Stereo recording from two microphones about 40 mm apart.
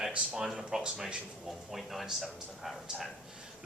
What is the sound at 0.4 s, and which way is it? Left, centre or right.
Speech, centre.